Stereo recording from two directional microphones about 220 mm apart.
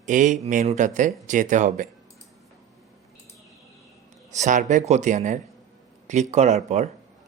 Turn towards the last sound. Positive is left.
turn(degrees=-30)  # may be behind; listen again after turning